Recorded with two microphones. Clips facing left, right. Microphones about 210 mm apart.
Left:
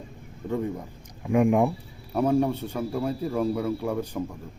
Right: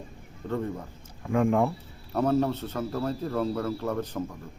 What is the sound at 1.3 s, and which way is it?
A man's voice, 15° left (ahead or behind).